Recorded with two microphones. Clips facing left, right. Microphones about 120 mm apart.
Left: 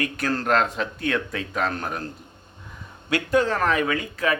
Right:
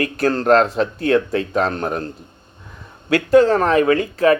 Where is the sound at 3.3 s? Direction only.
35° right (ahead or behind).